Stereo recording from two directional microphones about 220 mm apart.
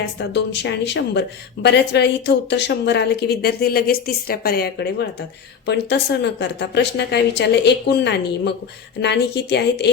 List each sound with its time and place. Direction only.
0.2 s a woman's voice: 50° left (ahead or behind)